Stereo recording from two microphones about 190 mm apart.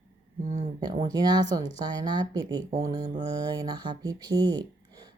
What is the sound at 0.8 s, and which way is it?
Speech, 20° right (ahead or behind).